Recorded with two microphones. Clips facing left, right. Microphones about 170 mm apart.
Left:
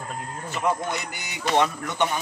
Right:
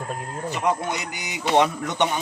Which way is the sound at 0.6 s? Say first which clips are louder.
Right 1 dB; 15° right (ahead or behind).